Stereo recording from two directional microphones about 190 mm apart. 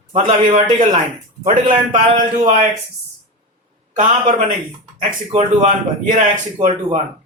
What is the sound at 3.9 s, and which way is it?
Speech, 40° right (ahead or behind).